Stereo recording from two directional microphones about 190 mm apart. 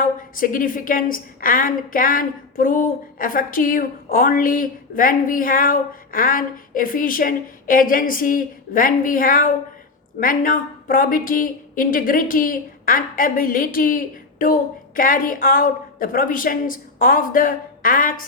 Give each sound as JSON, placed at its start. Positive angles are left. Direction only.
{"t": 0.0, "sound": "a woman's voice", "side_deg": 45}